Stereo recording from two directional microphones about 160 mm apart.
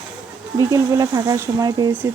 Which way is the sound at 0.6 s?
20° right (ahead or behind).